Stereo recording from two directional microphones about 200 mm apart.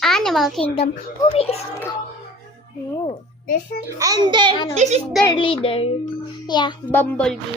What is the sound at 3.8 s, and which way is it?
Speech, 15° right (ahead or behind).